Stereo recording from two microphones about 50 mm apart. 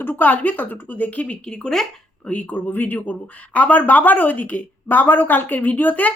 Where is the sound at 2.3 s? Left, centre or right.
Left.